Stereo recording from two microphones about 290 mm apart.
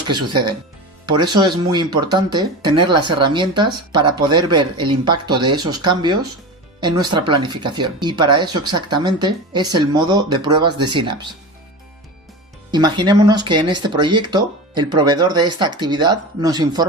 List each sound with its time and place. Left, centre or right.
0.1 s speech: centre
12.7 s speech: centre